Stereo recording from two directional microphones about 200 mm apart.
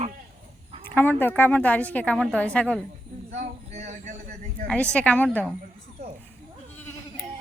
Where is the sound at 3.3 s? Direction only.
35° right (ahead or behind).